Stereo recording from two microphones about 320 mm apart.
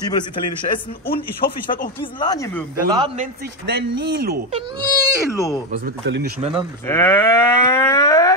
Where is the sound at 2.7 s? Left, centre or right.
Centre; by 4.6 s right.